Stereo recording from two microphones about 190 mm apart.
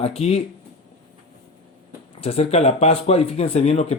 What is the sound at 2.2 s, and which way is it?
Speech, 30° left (ahead or behind).